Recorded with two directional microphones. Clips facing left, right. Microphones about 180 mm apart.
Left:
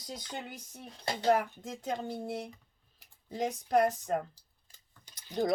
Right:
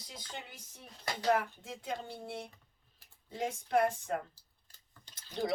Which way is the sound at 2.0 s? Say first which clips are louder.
Left 6 dB; 40° left (ahead or behind).